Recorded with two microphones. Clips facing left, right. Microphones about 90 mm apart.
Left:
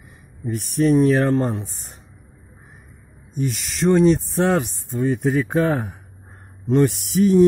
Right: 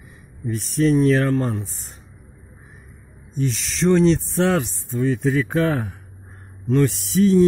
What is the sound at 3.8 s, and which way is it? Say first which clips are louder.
Speech: left 1 dB; 10° left (ahead or behind).